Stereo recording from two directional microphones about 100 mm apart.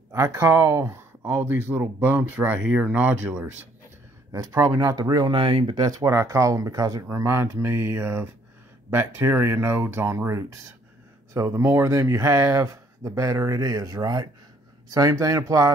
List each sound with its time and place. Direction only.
0.1 s speech: 30° right (ahead or behind)
4.3 s speech: 35° right (ahead or behind)
5.4 s speech: 60° right (ahead or behind)
5.8 s speech: 35° right (ahead or behind)